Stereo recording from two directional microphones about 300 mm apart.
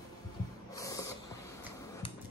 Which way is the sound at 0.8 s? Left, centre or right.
Centre.